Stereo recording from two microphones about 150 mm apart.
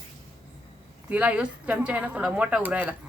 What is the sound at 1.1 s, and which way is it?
Speech, 10° right (ahead or behind).